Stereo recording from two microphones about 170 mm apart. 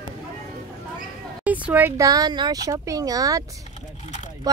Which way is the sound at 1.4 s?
10° right (ahead or behind).